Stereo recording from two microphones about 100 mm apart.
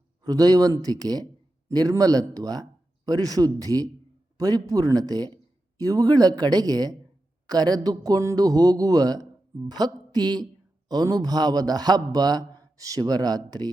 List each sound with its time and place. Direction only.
0.3 s a man's voice: 40° right (ahead or behind)